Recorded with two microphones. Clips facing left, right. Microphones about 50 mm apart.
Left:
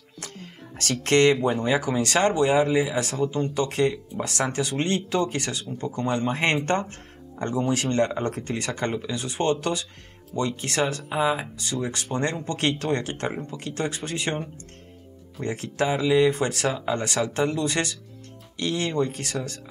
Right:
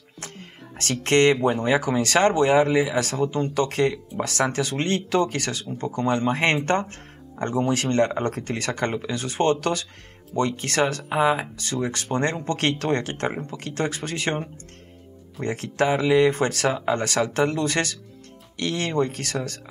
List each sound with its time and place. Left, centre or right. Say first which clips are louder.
0.2 s a sound: right 1 dB; right
0.7 s speech: right 1 dB; right
6.0 s speech: right 3 dB; right
11.1 s speech: right 3 dB; right
11.5 s speech: right 1 dB; right
11.9 s speech: right 2 dB; right
15.4 s speech: right 3 dB; right